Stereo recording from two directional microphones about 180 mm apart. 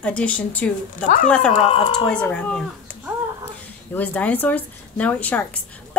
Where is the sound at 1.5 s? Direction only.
30° left (ahead or behind).